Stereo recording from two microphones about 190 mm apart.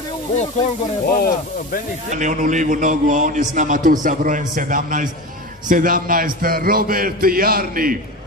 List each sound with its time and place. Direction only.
1.0 s speech: 50° left (ahead or behind)
2.0 s a man's voice: 40° right (ahead or behind)